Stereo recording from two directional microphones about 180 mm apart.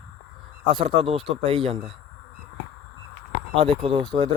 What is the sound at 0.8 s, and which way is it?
Speech, 35° right (ahead or behind).